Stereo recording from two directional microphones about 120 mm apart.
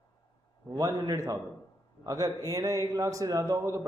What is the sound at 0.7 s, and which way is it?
A man's voice, 30° right (ahead or behind).